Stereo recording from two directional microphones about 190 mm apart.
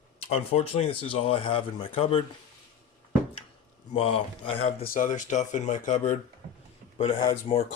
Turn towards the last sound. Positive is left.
turn(degrees=25)  # may be behind; listen again after turning